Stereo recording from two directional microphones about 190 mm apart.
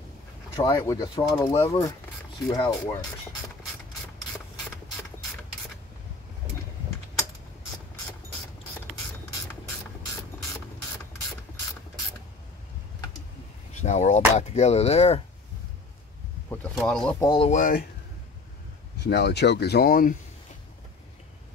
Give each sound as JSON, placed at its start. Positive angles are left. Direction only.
{"t": 0.6, "sound": "speech", "side_deg": 15}
{"t": 13.7, "sound": "speech", "side_deg": 40}
{"t": 16.7, "sound": "speech", "side_deg": 5}
{"t": 17.2, "sound": "speech", "side_deg": 25}
{"t": 17.5, "sound": "speech", "side_deg": 45}
{"t": 19.0, "sound": "speech", "side_deg": 60}